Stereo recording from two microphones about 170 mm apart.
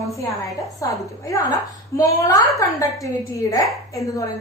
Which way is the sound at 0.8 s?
20° left (ahead or behind).